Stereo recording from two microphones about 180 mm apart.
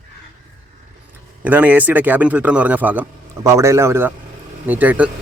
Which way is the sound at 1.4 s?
10° right (ahead or behind).